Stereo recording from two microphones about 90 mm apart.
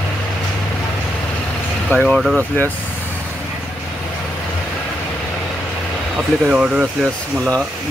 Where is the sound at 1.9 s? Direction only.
10° left (ahead or behind).